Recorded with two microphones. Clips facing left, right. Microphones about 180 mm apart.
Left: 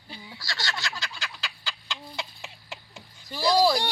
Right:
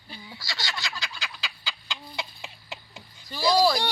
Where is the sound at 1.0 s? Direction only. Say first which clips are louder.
Even; 10° right (ahead or behind).